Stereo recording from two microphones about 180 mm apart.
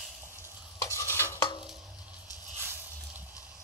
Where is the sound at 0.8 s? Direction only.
15° left (ahead or behind).